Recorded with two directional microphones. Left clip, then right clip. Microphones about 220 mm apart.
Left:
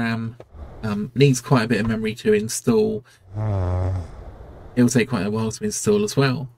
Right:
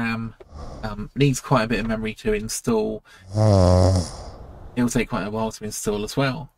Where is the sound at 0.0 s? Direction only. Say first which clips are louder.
Left 1 dB; 15° right (ahead or behind).